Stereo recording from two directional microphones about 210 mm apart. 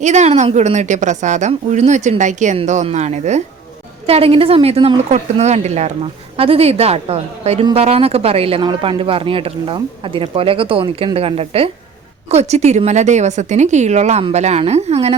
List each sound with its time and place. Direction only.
0.0 s a woman's voice: 35° right (ahead or behind)